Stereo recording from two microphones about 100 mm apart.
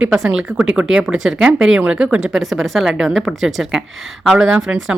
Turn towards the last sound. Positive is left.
turn(degrees=-5)  # may be behind; listen again after turning